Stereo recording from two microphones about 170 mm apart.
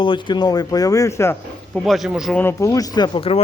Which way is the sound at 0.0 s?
30° left (ahead or behind).